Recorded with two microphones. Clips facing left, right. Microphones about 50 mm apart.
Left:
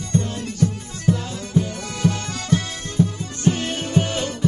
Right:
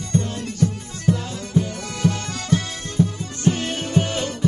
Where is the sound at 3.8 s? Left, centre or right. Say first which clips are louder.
Even; left.